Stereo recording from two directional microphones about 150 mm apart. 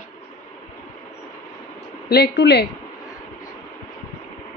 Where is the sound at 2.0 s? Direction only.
90° left.